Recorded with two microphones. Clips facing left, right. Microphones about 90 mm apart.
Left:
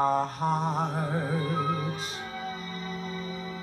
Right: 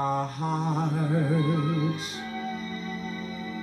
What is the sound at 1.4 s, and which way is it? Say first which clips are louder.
Music: right 3 dB; 45° left (ahead or behind).